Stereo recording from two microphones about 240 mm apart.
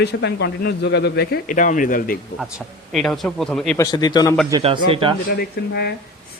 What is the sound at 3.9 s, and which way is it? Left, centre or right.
Speech, centre.